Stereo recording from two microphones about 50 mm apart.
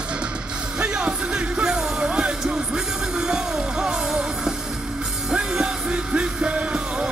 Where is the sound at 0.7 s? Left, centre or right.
Centre.